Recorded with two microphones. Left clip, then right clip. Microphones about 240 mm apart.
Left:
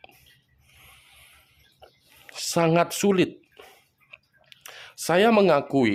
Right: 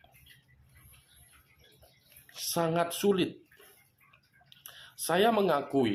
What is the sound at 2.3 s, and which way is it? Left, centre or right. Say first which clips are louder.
Speech: left 8 dB; left.